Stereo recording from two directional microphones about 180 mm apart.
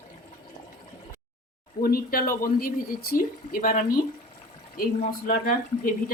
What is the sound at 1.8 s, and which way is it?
Speech, 55° left (ahead or behind).